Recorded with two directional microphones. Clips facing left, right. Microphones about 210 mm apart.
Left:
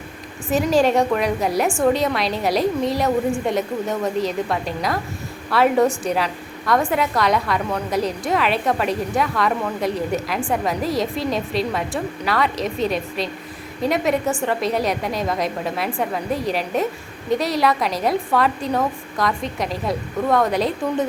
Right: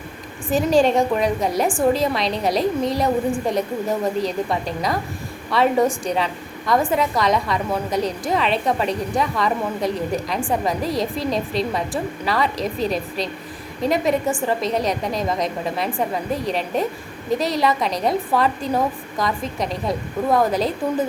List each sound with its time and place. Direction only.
0.4 s a woman's voice: centre (ahead or behind)